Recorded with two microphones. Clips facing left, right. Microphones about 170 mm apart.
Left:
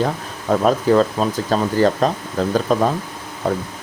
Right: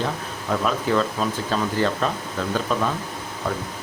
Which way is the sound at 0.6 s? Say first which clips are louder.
Left 7 dB; 40° left (ahead or behind).